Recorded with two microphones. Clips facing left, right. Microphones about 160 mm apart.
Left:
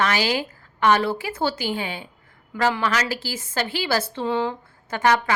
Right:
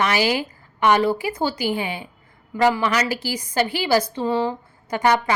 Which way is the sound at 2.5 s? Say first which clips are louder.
Right 3 dB; 15° right (ahead or behind).